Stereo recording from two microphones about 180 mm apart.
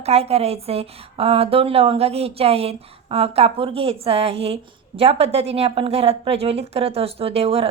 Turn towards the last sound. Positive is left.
turn(degrees=-35)  # may be behind; listen again after turning